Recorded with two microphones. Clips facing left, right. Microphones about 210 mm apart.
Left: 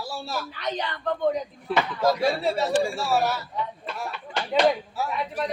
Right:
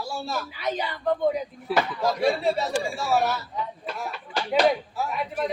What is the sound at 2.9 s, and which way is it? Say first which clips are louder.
Speech: even; centre (ahead or behind).